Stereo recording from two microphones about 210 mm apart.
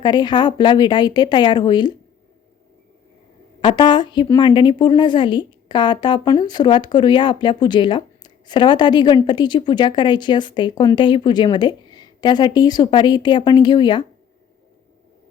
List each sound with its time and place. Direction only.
0.0 s speech: 20° left (ahead or behind)
3.6 s speech: 25° left (ahead or behind)